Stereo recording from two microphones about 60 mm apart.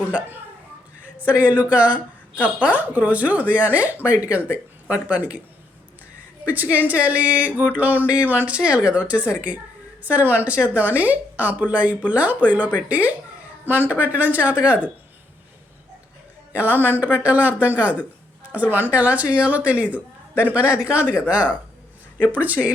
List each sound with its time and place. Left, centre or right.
1.0 s speech: right
6.4 s speech: right
16.5 s speech: right